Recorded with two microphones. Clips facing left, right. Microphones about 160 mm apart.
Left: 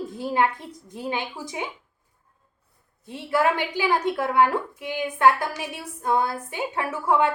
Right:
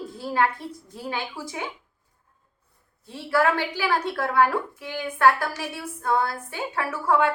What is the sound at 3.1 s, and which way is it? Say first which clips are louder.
A woman's voice: even; 20° left (ahead or behind).